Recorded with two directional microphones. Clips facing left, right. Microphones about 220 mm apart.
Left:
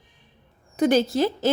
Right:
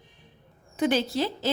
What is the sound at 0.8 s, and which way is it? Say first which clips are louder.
Speech: left 5 dB; 45° left (ahead or behind).